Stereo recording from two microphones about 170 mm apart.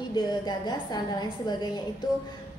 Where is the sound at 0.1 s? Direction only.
25° left (ahead or behind).